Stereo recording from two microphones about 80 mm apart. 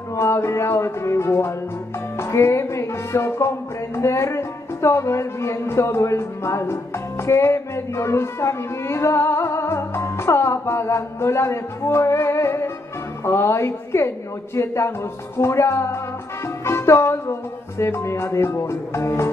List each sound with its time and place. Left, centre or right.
0.1 s music: left